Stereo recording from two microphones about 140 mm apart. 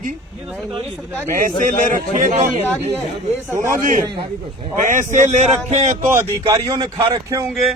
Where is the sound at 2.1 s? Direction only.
70° right (ahead or behind).